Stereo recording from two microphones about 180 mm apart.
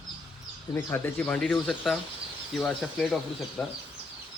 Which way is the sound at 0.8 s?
10° left (ahead or behind).